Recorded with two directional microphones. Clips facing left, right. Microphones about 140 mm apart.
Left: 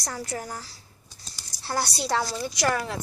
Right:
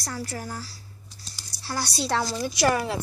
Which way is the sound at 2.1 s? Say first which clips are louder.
Right 1 dB; 5° left (ahead or behind).